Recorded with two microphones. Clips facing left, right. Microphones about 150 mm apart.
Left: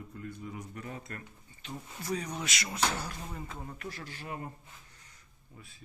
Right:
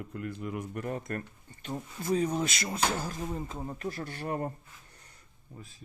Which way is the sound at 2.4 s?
45° right (ahead or behind).